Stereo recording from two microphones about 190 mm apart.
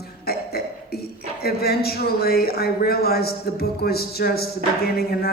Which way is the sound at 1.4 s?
55° left (ahead or behind).